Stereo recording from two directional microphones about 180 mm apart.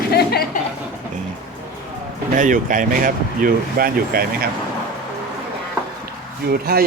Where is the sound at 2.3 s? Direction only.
45° right (ahead or behind).